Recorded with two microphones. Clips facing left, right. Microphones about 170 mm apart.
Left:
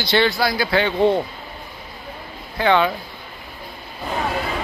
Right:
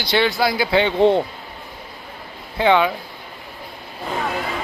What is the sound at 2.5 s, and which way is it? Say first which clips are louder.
Speech: right 1 dB; 15° right (ahead or behind).